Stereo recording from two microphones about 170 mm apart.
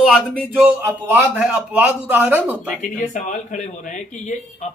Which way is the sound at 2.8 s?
45° left (ahead or behind).